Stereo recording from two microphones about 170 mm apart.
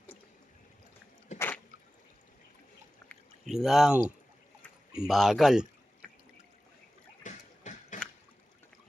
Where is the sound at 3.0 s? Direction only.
Centre (ahead or behind).